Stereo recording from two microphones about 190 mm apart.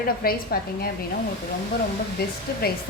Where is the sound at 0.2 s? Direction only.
50° left (ahead or behind).